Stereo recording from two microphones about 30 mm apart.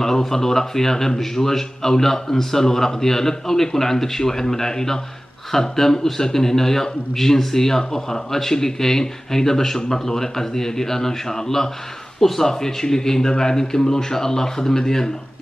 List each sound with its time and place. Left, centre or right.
0.0 s a man's voice: centre